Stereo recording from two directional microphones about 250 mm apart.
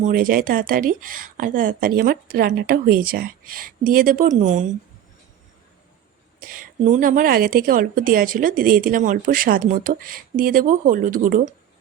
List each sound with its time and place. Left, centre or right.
0.0 s a woman's voice: right
6.4 s a woman's voice: right